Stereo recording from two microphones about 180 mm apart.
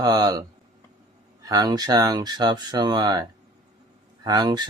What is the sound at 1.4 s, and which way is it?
Speech, 20° right (ahead or behind).